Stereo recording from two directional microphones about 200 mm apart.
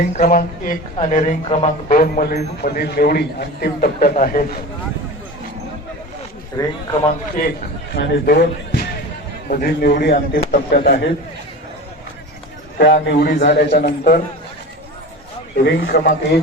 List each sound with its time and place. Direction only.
0.2 s speech: 45° left (ahead or behind)
2.0 s a man's voice: 45° left (ahead or behind)
6.6 s speech: 20° left (ahead or behind)
7.9 s a man's voice: 55° left (ahead or behind)
12.8 s a man's voice: 60° left (ahead or behind)
15.6 s a man's voice: 55° left (ahead or behind)